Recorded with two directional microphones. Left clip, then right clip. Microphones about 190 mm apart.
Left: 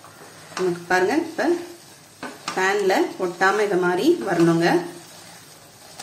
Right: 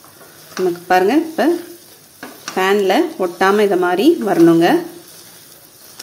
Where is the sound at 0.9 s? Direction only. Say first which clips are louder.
Right 7 dB; 45° right (ahead or behind).